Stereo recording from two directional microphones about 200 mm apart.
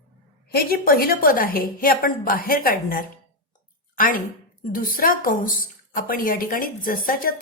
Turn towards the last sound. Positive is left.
turn(degrees=45)  # may be behind; listen again after turning